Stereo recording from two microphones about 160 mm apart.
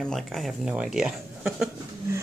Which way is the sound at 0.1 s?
Centre (ahead or behind).